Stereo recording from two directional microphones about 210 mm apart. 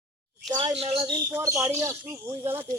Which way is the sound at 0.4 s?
25° right (ahead or behind).